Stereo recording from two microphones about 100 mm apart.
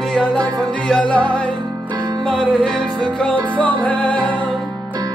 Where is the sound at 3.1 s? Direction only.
10° left (ahead or behind).